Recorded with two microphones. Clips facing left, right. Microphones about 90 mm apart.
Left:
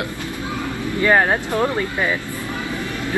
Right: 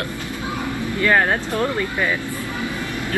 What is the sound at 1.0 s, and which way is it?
Speech, 15° left (ahead or behind).